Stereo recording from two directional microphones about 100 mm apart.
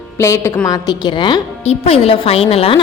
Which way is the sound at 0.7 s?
40° left (ahead or behind).